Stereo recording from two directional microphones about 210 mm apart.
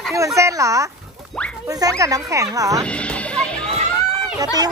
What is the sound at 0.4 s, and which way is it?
Speech, 15° right (ahead or behind).